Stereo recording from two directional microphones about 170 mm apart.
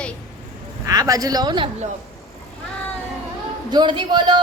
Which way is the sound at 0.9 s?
20° right (ahead or behind).